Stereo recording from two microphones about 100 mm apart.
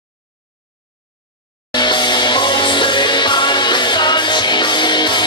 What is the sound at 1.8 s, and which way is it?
Music, 50° left (ahead or behind).